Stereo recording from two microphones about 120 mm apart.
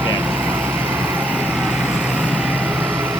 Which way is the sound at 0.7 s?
15° right (ahead or behind).